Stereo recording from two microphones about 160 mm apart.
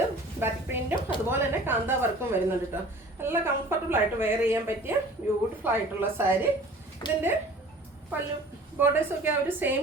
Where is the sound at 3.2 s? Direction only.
15° right (ahead or behind).